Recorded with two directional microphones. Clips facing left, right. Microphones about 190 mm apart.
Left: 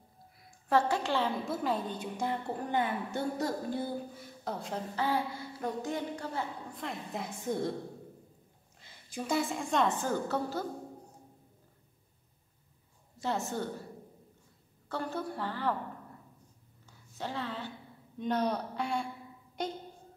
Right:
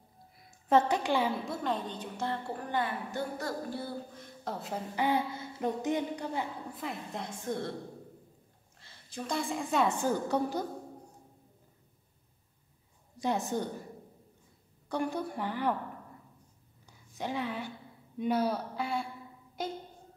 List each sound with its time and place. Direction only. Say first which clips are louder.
0.5 s a woman's voice: right 2 dB; 20° right (ahead or behind)
1.4 s a woman's voice: left 1 dB; 5° left (ahead or behind)
4.9 s speech: right 3 dB; 15° right (ahead or behind)
6.7 s a woman's voice: even; centre (ahead or behind)
8.7 s a woman's voice: left 2 dB; 10° left (ahead or behind); by 10.6 s 15° right (ahead or behind)
13.2 s a woman's voice: right 2 dB; 15° right (ahead or behind)
14.9 s a woman's voice: right 3 dB; 15° right (ahead or behind)
17.2 s a woman's voice: right 3 dB; 15° right (ahead or behind)